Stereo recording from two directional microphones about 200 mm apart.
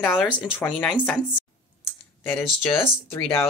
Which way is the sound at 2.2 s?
10° left (ahead or behind).